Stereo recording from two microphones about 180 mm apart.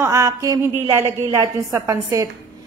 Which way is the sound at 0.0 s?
15° right (ahead or behind).